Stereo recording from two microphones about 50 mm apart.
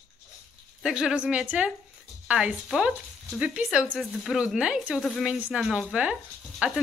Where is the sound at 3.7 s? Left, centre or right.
Right.